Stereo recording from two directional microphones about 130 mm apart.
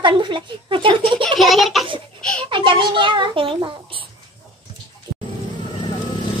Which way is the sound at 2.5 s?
40° right (ahead or behind).